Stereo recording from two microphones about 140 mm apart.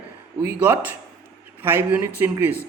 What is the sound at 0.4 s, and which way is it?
A woman's voice, 15° right (ahead or behind).